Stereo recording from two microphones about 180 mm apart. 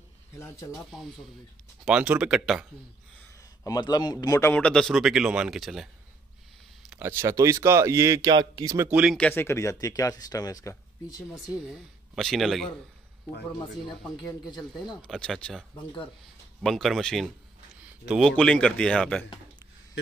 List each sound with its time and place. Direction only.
0.7 s a man's voice: centre (ahead or behind)
3.6 s a man's voice: 20° left (ahead or behind); by 5.9 s centre (ahead or behind)
6.9 s speech: 10° right (ahead or behind)
9.1 s speech: 10° left (ahead or behind)
11.3 s a man's voice: centre (ahead or behind)
15.0 s a man's voice: 5° left (ahead or behind)
16.6 s a man's voice: centre (ahead or behind)
17.7 s a sound: 5° right (ahead or behind)
18.3 s a man's voice: 5° left (ahead or behind)